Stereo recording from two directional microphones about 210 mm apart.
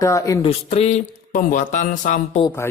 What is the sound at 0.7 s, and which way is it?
A man's voice, 30° left (ahead or behind).